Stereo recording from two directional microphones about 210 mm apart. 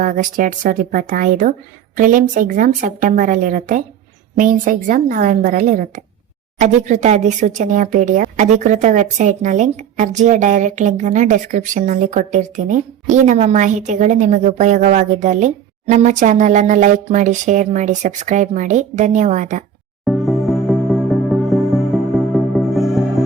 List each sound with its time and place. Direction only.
0.0 s speech: 40° right (ahead or behind)
20.1 s music: centre (ahead or behind)